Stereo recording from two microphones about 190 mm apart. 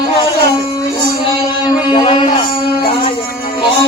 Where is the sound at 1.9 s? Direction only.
25° left (ahead or behind).